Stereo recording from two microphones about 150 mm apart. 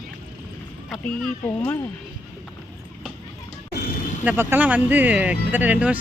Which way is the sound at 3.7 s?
90° left.